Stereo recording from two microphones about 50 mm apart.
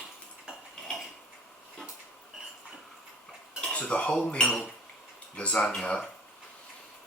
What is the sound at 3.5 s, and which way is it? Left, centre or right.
Cutlery, centre.